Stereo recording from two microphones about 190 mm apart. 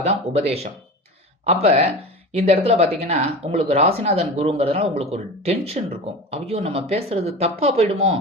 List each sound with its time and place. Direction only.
0.0 s speech: 35° right (ahead or behind)